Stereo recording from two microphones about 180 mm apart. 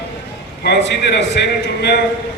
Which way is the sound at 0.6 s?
70° left (ahead or behind).